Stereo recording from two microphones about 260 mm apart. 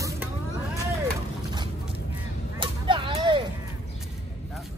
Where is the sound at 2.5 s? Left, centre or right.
Centre.